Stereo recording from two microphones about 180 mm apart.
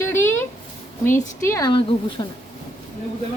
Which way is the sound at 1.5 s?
20° left (ahead or behind).